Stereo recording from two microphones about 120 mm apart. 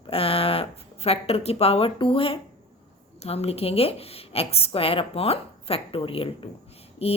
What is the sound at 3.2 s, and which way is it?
A woman's voice, 60° left (ahead or behind).